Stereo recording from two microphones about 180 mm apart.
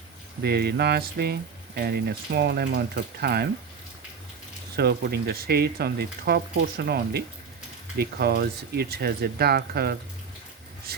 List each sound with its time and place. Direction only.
0.4 s speech: 60° right (ahead or behind)
4.8 s speech: 60° right (ahead or behind)